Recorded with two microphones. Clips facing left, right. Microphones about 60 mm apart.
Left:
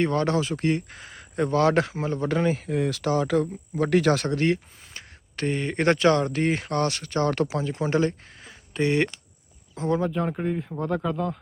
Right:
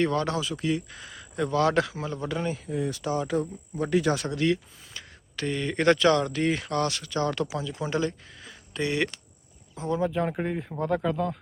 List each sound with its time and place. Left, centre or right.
0.0 s speech: left
3.8 s speech: left
4.3 s speech: left
9.7 s speech: left
10.1 s speech: centre